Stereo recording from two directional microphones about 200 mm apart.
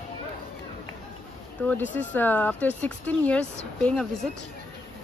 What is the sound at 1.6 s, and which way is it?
Speech, 10° left (ahead or behind).